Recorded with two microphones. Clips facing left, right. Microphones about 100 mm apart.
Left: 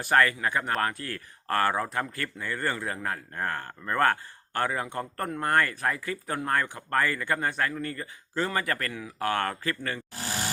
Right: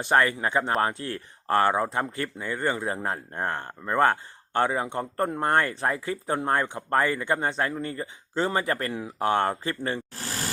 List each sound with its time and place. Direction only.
0.0 s speech: 20° right (ahead or behind)